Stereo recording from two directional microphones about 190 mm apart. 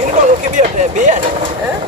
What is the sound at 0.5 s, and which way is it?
Speech, 40° right (ahead or behind).